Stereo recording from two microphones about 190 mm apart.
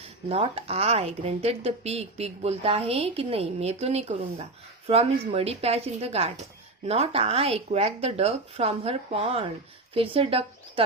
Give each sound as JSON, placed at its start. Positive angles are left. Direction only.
{"t": 0.3, "sound": "a woman's voice", "side_deg": -30}